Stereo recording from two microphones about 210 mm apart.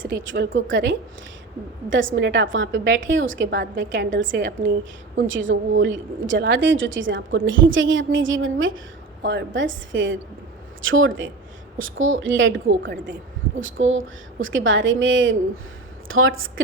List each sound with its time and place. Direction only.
0.1 s a woman's voice: 60° right (ahead or behind)
9.2 s a woman's voice: 55° right (ahead or behind); by 16.6 s 70° right (ahead or behind)